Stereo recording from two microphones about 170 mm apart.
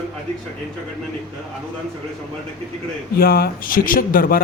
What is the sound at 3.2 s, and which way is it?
Speech, 60° left (ahead or behind).